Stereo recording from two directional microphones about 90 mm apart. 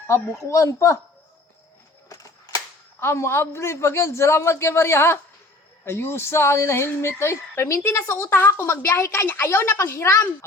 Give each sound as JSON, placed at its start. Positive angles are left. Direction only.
{"t": 0.1, "sound": "speech", "side_deg": 35}
{"t": 2.0, "sound": "a sound", "side_deg": 40}
{"t": 3.0, "sound": "a woman's voice", "side_deg": 30}